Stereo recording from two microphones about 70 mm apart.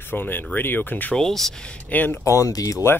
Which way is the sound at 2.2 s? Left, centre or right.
Left.